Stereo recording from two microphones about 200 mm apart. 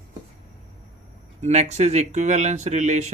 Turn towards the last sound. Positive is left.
turn(degrees=-35)  # may be behind; listen again after turning